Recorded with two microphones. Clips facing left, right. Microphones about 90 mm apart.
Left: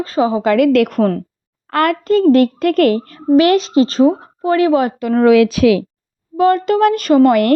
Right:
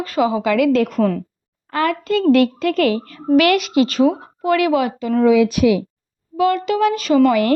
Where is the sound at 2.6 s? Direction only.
50° left (ahead or behind); by 4.9 s 35° left (ahead or behind).